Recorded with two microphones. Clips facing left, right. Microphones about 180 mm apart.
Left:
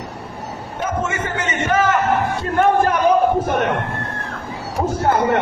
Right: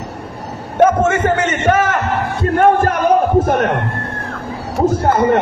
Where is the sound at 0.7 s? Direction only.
65° right (ahead or behind); by 3.0 s 50° right (ahead or behind).